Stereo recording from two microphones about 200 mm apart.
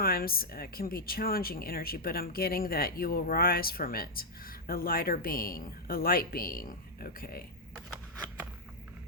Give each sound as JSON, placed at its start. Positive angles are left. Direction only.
{"t": 0.0, "sound": "speech", "side_deg": 50}